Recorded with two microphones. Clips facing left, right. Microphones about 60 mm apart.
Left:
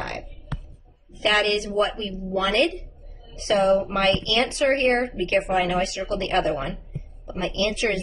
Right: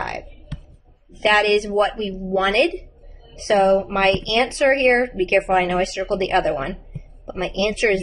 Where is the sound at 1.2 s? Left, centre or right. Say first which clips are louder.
Right 5 dB; right.